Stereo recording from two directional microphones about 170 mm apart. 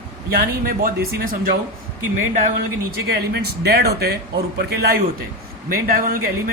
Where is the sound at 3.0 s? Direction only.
70° right (ahead or behind).